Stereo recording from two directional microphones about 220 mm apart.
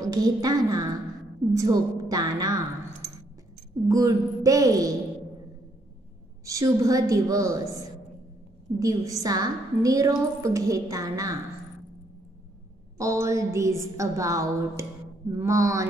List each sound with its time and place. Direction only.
0.1 s a woman's voice: 15° right (ahead or behind)
3.9 s a woman's voice: 15° right (ahead or behind)
6.4 s a woman's voice: 15° right (ahead or behind)
8.7 s a woman's voice: 15° right (ahead or behind)
12.9 s a woman's voice: 15° right (ahead or behind)